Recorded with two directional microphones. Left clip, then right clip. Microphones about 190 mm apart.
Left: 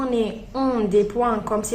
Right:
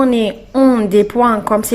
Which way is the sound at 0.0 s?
40° right (ahead or behind).